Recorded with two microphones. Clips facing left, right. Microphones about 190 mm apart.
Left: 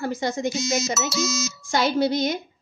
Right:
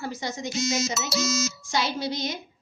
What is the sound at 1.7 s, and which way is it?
Speech, 55° left (ahead or behind).